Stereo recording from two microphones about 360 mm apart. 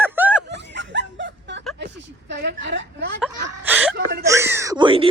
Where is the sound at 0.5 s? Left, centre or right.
Right.